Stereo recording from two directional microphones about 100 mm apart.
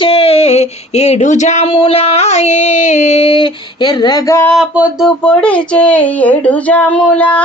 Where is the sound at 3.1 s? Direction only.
75° left (ahead or behind); by 4.2 s 45° left (ahead or behind).